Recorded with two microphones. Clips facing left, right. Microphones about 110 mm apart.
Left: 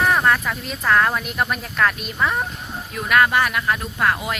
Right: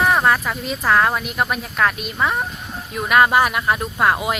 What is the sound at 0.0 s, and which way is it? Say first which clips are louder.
A woman's voice: right 1 dB; 10° right (ahead or behind).